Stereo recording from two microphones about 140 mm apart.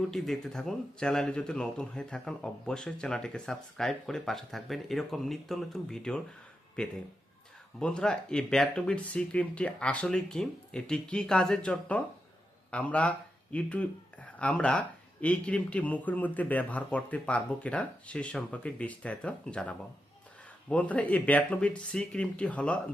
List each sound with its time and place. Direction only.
0.1 s speech: centre (ahead or behind)